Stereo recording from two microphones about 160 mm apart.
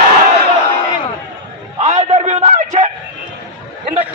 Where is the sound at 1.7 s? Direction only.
45° right (ahead or behind).